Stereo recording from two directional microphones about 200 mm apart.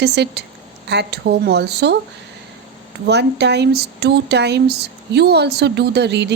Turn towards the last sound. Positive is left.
turn(degrees=-60)  # may be behind; listen again after turning